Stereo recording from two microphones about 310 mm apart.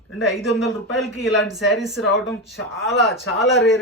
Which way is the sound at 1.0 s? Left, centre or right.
Centre.